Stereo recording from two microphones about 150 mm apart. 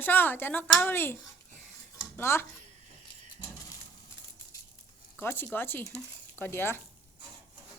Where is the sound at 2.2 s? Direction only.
15° left (ahead or behind).